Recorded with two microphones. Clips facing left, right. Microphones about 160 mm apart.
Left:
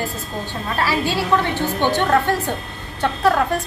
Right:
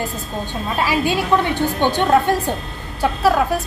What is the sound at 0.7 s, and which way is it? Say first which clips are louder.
A woman's voice: right 2 dB; 15° right (ahead or behind).